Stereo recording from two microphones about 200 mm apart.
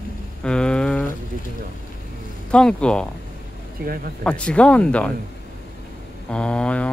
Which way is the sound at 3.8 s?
50° right (ahead or behind).